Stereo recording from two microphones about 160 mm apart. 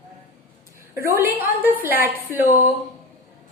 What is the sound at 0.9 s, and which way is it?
A woman's voice, 15° right (ahead or behind).